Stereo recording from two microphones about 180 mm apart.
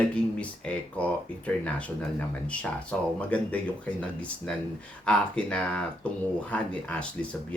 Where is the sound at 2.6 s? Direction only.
5° left (ahead or behind).